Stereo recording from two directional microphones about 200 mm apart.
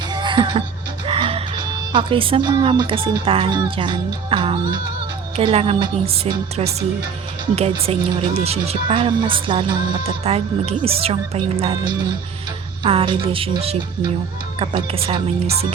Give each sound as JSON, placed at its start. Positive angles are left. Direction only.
{"t": 0.1, "sound": "music", "side_deg": -20}
{"t": 1.9, "sound": "a woman's voice", "side_deg": -25}